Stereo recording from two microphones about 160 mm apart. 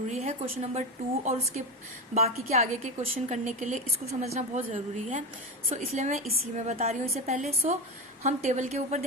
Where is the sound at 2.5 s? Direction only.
40° right (ahead or behind).